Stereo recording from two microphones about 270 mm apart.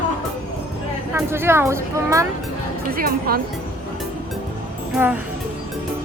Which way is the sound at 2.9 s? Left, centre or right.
Right.